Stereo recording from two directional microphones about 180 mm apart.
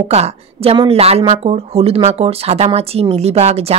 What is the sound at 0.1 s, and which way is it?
A woman's voice, 35° right (ahead or behind).